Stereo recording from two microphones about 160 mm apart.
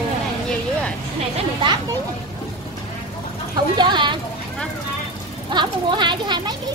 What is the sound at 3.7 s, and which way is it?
Speech, 30° right (ahead or behind).